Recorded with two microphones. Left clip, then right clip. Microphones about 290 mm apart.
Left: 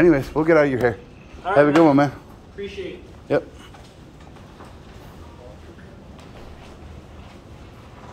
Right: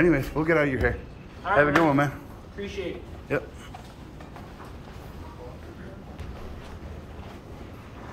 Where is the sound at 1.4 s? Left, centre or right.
Left.